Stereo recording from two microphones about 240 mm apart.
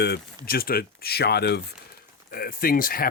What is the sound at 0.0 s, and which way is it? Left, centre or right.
Speech, left.